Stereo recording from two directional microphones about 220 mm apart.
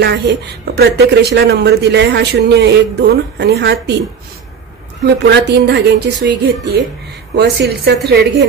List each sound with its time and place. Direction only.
0.7 s speech: 50° right (ahead or behind)
5.0 s speech: 50° right (ahead or behind)